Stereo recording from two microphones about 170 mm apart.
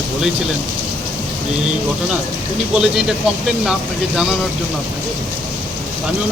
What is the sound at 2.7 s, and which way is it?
Speech, 5° right (ahead or behind).